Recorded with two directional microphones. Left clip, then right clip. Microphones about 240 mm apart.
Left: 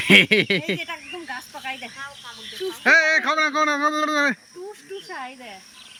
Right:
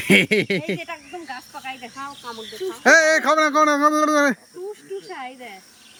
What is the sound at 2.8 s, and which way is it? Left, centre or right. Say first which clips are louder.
A man's voice: right 2 dB; right.